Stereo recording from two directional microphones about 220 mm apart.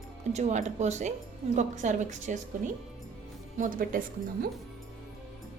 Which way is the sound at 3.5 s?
40° right (ahead or behind).